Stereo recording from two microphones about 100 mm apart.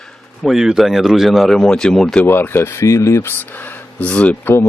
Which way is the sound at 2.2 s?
20° left (ahead or behind).